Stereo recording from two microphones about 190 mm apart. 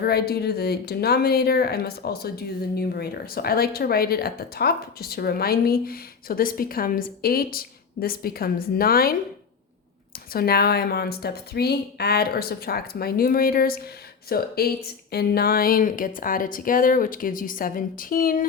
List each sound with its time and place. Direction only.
0.0 s speech: 55° left (ahead or behind)
10.3 s speech: 55° left (ahead or behind)